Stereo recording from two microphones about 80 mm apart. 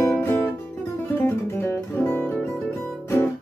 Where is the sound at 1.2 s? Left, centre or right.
Left.